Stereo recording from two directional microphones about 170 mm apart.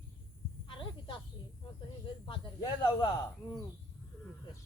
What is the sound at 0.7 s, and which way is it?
Snake, 30° left (ahead or behind).